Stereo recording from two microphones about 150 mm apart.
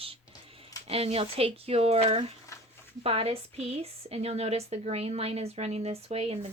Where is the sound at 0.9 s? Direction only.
40° right (ahead or behind).